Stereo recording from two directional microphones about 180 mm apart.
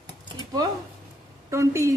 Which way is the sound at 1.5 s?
15° right (ahead or behind).